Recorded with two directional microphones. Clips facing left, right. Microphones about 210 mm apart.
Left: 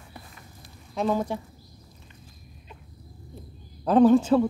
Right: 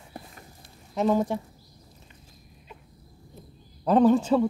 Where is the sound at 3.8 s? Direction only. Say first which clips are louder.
Left 2 dB; 5° left (ahead or behind).